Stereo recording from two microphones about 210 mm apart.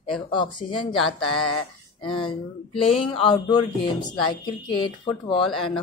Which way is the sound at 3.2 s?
25° left (ahead or behind).